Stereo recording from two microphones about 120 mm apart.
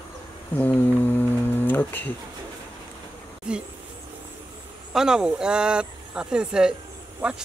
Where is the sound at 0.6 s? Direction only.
15° left (ahead or behind).